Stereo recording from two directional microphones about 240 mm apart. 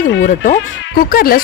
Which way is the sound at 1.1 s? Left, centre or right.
Left.